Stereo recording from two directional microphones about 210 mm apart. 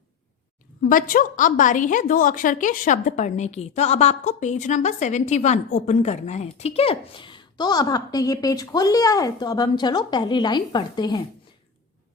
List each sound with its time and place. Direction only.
0.9 s a woman's voice: 40° left (ahead or behind); by 11.2 s 20° left (ahead or behind)